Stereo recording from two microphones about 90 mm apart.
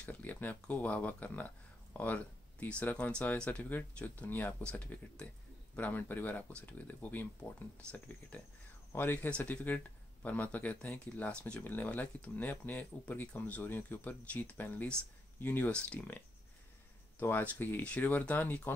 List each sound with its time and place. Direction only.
0.0 s speech: 15° left (ahead or behind)
17.2 s speech: 25° left (ahead or behind)